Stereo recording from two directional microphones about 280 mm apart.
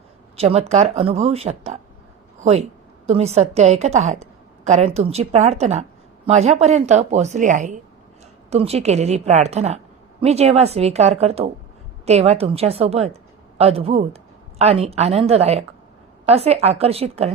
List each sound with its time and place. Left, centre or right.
0.3 s a woman's voice: right